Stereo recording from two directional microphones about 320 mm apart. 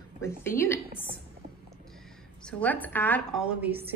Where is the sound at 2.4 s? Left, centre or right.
Centre.